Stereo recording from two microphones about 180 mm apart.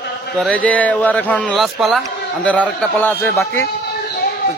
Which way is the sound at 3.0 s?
15° left (ahead or behind).